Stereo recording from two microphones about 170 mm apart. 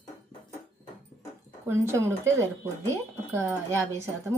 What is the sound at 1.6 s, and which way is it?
Speech, 15° right (ahead or behind).